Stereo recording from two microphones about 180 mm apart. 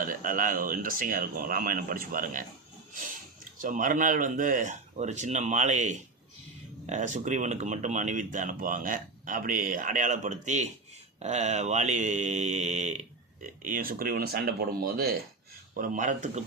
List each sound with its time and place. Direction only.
0.0 s speech: 50° right (ahead or behind)
3.6 s speech: 50° right (ahead or behind)
11.2 s mantra: 40° right (ahead or behind)
13.4 s speech: 50° right (ahead or behind)